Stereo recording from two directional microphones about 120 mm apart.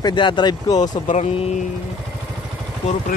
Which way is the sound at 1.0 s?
90° left.